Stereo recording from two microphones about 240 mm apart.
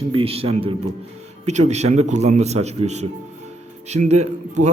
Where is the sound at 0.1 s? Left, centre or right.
Right.